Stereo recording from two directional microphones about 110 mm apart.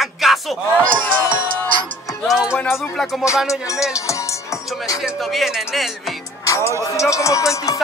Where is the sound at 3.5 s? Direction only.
30° left (ahead or behind).